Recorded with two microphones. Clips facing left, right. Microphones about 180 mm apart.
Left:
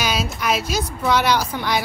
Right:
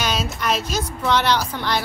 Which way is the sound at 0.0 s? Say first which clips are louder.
Left 1 dB; 5° left (ahead or behind).